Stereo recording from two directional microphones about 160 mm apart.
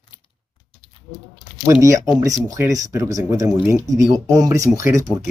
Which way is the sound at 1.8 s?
20° right (ahead or behind).